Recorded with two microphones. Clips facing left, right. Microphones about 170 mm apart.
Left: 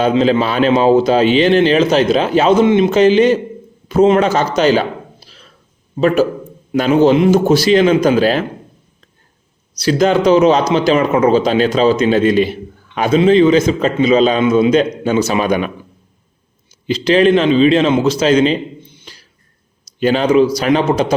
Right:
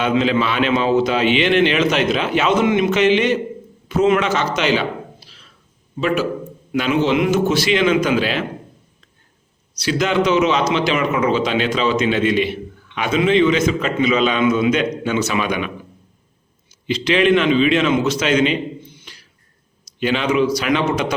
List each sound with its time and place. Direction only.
0.0 s a man's voice: 35° left (ahead or behind)
9.7 s a man's voice: 40° left (ahead or behind)
16.8 s a man's voice: 35° left (ahead or behind)